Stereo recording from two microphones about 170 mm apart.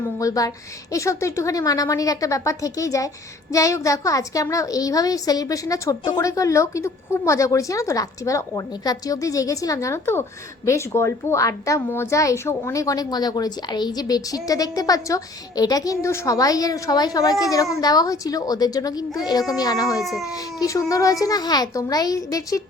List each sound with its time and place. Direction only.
0.2 s a woman's voice: 20° left (ahead or behind)